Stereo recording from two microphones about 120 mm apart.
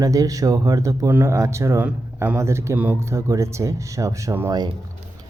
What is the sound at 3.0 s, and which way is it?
Speech, 25° right (ahead or behind).